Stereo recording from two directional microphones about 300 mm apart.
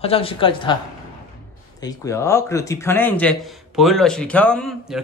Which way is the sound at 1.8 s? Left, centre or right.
Centre.